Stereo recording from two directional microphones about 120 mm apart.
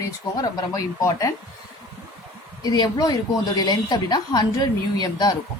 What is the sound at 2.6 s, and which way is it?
Speech, 35° left (ahead or behind).